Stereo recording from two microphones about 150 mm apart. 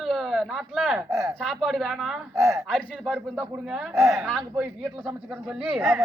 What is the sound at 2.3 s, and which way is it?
Speech, 20° right (ahead or behind).